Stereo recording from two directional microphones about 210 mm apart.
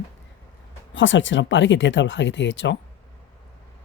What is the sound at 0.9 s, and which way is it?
Speech, 65° left (ahead or behind).